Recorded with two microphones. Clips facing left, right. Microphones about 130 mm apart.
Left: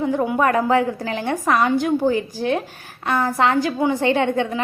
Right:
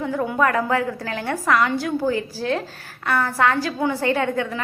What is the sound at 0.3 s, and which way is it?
A woman's voice, 20° left (ahead or behind).